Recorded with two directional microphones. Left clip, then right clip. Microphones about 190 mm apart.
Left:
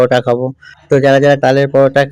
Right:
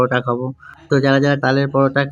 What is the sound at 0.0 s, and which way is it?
Speech, 25° left (ahead or behind).